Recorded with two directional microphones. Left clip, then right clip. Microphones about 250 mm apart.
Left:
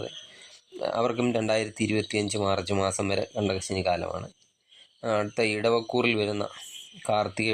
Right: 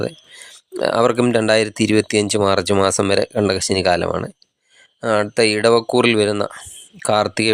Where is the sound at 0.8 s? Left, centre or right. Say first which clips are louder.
Right 11 dB; right.